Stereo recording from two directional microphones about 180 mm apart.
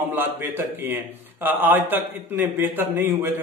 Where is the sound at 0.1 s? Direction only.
10° right (ahead or behind).